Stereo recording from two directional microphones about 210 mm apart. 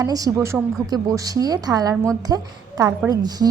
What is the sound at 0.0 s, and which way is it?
A woman's voice, 15° right (ahead or behind).